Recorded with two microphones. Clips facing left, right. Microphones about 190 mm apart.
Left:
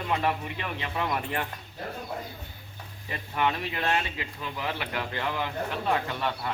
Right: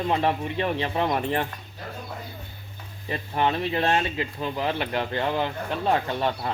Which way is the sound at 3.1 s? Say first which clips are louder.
Right 4 dB; 30° right (ahead or behind).